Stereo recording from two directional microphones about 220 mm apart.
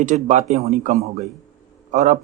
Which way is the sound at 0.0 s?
35° right (ahead or behind).